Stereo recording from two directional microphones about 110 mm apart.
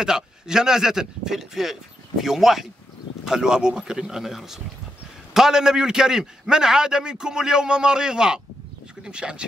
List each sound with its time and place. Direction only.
0.0 s a man's voice: 5° right (ahead or behind)